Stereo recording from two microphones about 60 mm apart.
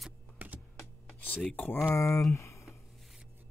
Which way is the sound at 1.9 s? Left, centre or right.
Left.